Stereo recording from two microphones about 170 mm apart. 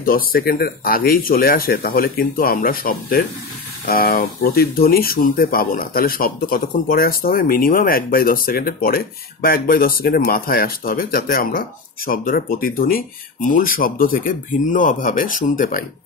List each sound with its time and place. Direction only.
0.0 s speech: 60° left (ahead or behind)